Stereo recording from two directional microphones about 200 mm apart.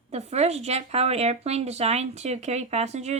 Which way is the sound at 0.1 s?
30° right (ahead or behind).